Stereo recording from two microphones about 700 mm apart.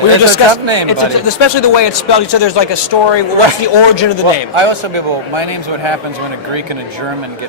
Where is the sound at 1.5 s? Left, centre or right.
Left.